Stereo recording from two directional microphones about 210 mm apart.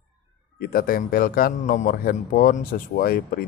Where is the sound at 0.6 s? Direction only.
45° left (ahead or behind).